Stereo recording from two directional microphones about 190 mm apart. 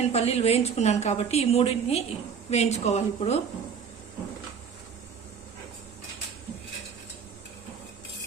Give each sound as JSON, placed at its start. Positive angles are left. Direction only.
{"t": 0.1, "sound": "a woman's voice", "side_deg": 35}